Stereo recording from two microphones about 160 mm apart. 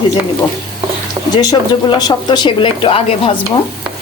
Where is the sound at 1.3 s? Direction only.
25° left (ahead or behind).